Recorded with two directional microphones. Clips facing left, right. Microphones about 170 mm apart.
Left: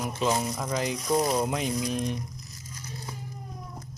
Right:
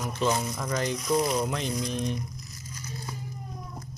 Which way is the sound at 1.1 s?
30° left (ahead or behind).